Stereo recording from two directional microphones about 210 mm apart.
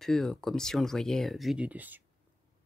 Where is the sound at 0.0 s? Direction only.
Centre (ahead or behind).